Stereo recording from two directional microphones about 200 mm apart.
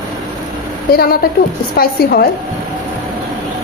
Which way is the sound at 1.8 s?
50° left (ahead or behind).